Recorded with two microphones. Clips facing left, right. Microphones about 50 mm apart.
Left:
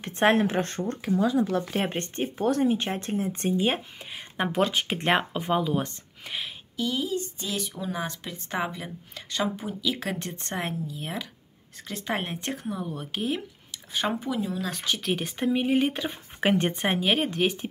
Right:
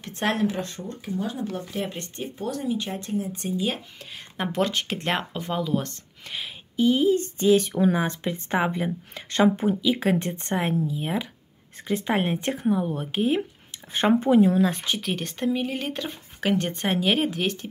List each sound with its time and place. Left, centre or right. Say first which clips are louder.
0.0 s speech: left 3 dB; left
0.5 s speech: left 3 dB; left
0.8 s speech: left 5 dB; left
1.8 s speech: left 3 dB; left
4.0 s speech: left 1 dB; centre
6.8 s speech: right 8 dB; right
8.0 s speech: right 6 dB; right
9.8 s speech: right 7 dB; centre
10.5 s speech: right 7 dB; centre
14.2 s speech: right 11 dB; right
14.6 s speech: right 6 dB; right
15.0 s speech: even; centre
16.3 s speech: left 1 dB; left
16.7 s speech: right 1 dB; centre